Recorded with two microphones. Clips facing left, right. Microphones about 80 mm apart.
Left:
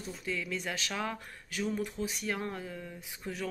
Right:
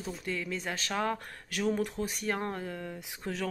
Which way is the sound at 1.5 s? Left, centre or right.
Right.